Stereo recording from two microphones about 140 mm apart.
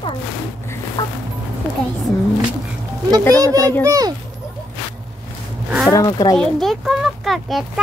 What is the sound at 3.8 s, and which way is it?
Speech, 25° right (ahead or behind).